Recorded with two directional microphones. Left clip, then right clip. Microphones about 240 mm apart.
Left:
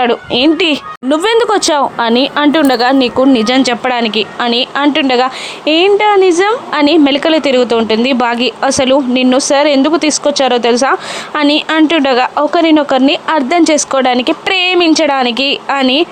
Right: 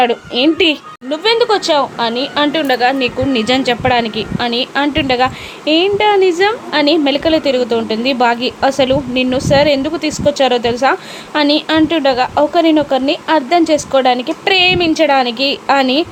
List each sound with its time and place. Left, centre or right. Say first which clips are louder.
0.0 s speech: left 2 dB; left